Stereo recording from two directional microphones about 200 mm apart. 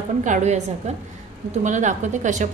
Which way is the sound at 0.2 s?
35° right (ahead or behind).